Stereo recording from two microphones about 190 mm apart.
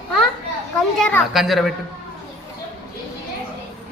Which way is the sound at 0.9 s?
Centre (ahead or behind).